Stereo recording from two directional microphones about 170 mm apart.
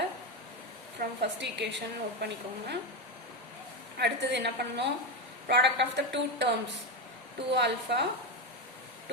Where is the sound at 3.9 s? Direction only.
80° right.